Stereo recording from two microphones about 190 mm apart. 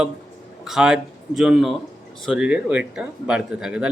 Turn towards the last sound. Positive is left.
turn(degrees=-5)  # may be behind; listen again after turning